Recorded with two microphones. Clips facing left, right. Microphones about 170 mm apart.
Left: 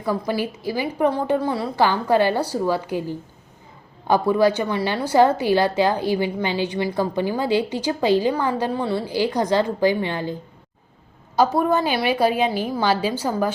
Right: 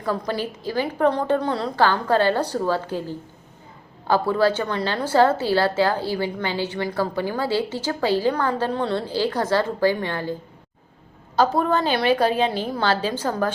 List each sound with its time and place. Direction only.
0.0 s a woman's voice: 10° left (ahead or behind)
11.3 s a woman's voice: 10° left (ahead or behind)